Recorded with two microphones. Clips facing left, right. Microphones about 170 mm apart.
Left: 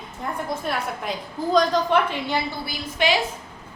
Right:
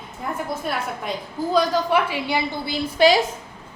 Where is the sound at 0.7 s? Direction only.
5° right (ahead or behind).